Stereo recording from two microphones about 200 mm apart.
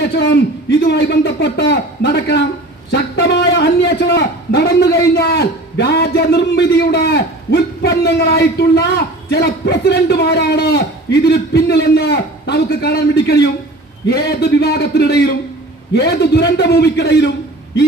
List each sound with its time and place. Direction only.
0.0 s a man's voice: 55° left (ahead or behind)
2.9 s a sound: 55° left (ahead or behind)
4.9 s a man's voice: 55° left (ahead or behind)